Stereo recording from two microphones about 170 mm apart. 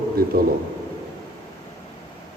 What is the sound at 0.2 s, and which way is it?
Speech, 65° right (ahead or behind).